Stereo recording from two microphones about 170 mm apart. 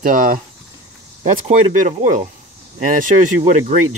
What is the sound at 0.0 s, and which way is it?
Speech, 55° right (ahead or behind).